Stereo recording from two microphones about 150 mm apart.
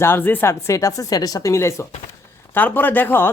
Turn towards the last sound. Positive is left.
turn(degrees=15)  # may be behind; listen again after turning